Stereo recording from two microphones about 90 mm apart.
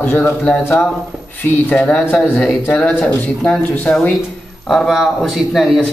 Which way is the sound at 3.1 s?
20° left (ahead or behind).